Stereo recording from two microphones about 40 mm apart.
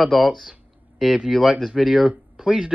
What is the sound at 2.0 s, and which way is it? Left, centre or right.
Speech, right.